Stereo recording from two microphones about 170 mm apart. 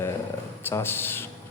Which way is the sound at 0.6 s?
15° left (ahead or behind).